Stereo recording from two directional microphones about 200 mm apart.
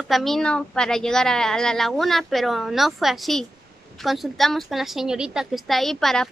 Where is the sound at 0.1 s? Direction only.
Centre (ahead or behind).